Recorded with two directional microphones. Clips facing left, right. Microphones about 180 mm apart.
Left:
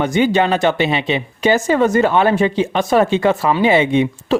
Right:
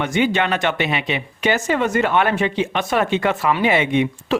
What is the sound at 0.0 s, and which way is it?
Speech, 35° left (ahead or behind).